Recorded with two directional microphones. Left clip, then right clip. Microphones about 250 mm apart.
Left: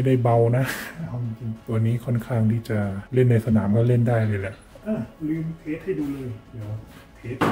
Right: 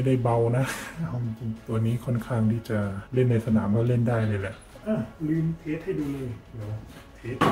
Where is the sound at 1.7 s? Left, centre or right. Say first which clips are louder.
Left 2 dB; centre.